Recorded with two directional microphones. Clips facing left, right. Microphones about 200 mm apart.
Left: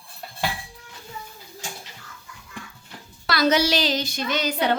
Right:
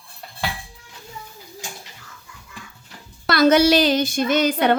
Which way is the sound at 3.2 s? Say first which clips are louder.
Right 6 dB; 50° right (ahead or behind).